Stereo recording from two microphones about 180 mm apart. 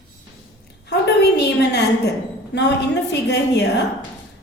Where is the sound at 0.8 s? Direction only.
70° left (ahead or behind).